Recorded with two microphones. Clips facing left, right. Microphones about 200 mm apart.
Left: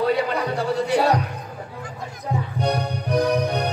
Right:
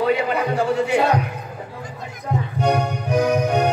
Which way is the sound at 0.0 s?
35° left (ahead or behind).